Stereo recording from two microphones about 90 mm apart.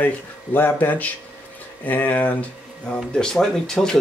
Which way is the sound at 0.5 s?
20° left (ahead or behind).